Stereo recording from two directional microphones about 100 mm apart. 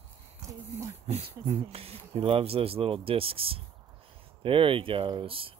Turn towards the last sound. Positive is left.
turn(degrees=-65)  # may be behind; listen again after turning